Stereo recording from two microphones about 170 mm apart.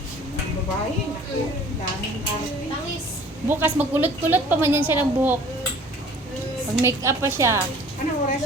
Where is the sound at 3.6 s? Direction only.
10° right (ahead or behind).